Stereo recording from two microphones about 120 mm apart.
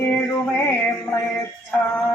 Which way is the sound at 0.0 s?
15° left (ahead or behind).